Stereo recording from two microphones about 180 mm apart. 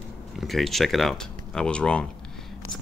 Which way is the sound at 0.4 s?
Centre (ahead or behind).